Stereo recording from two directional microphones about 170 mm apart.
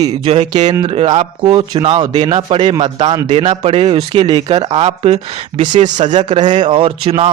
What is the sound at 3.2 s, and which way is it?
Speech, 40° right (ahead or behind).